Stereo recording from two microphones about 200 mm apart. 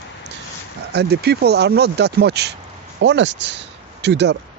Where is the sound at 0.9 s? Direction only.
55° right (ahead or behind).